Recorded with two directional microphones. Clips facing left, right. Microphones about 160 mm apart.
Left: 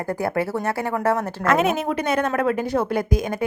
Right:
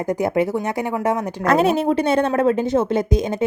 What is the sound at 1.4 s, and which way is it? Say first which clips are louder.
A woman's voice: right 4 dB; 35° right (ahead or behind).